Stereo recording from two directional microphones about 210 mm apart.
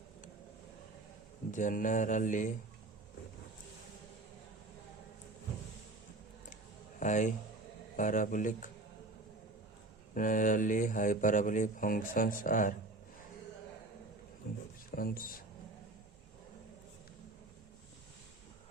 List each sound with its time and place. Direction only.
1.5 s speech: 35° left (ahead or behind)
7.0 s a man's voice: 35° left (ahead or behind)
10.2 s speech: 40° left (ahead or behind)
14.8 s speech: 45° left (ahead or behind)